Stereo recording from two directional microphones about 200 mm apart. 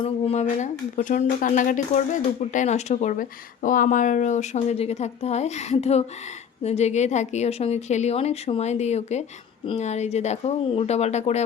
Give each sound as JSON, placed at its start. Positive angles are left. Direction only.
{"t": 0.0, "sound": "speech", "side_deg": 30}